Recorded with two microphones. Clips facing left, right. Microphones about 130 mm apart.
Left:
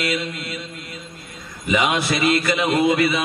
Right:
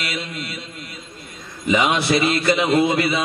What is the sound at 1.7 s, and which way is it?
A man's voice, 30° right (ahead or behind).